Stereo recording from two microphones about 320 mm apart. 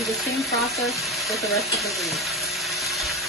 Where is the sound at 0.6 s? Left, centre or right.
Centre.